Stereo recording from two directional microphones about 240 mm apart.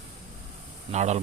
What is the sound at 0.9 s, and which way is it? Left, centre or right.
Speech, right.